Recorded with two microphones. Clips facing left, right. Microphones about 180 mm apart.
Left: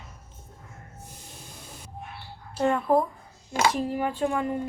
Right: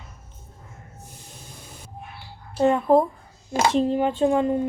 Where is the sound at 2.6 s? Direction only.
20° right (ahead or behind).